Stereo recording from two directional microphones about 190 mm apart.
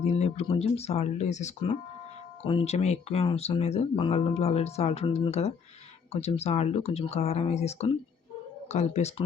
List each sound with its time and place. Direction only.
0.0 s speech: 35° left (ahead or behind)